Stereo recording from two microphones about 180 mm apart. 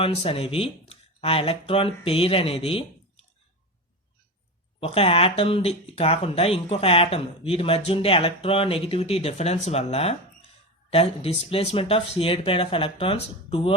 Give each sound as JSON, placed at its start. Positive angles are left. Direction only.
{"t": 0.0, "sound": "speech", "side_deg": 35}
{"t": 4.8, "sound": "speech", "side_deg": 30}